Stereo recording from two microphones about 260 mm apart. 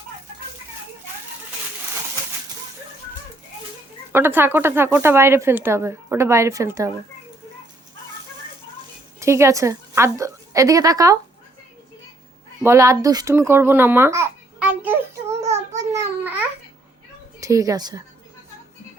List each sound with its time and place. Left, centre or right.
4.1 s speech: centre
9.2 s a woman's voice: centre
12.6 s a child's voice: centre
15.3 s child singing: right
17.4 s speech: centre